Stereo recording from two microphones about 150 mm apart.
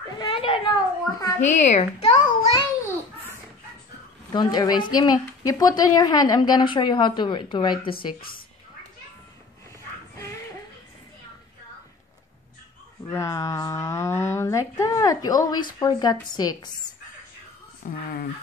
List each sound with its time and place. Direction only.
0.2 s a sound: 35° left (ahead or behind)
1.4 s speech: 50° left (ahead or behind)
4.3 s a woman's voice: 30° left (ahead or behind)
8.2 s a woman's voice: 75° left (ahead or behind)
13.1 s a woman's voice: 20° left (ahead or behind)
17.8 s speech: 85° left